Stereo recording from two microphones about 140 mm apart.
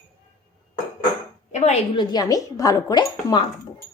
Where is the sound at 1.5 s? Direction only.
55° left (ahead or behind).